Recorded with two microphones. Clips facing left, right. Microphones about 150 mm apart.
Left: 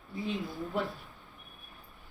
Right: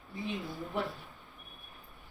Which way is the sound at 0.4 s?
Centre (ahead or behind).